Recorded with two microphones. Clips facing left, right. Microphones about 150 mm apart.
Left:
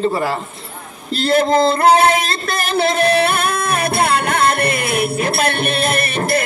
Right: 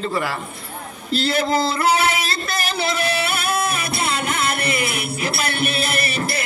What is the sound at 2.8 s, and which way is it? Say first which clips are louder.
Music: left 9 dB; 50° left (ahead or behind).